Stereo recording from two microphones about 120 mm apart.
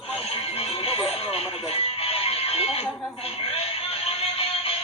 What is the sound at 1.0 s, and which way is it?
Music, 55° left (ahead or behind).